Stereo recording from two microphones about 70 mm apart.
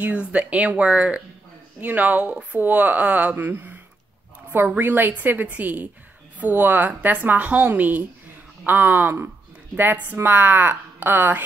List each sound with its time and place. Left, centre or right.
0.0 s a woman's voice: centre